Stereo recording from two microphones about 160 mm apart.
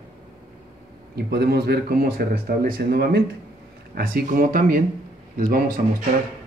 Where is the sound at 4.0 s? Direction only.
65° right (ahead or behind).